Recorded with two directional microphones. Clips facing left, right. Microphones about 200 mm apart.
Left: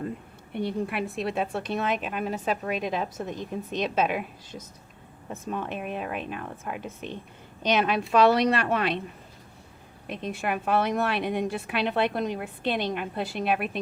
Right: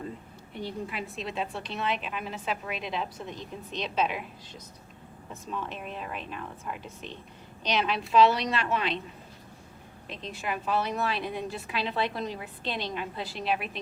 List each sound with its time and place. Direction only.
0.5 s a woman's voice: 60° left (ahead or behind)
10.1 s a woman's voice: 55° left (ahead or behind)